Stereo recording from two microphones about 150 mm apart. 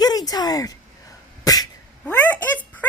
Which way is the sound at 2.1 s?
10° left (ahead or behind).